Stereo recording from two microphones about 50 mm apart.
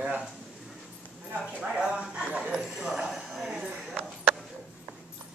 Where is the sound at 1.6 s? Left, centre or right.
Centre.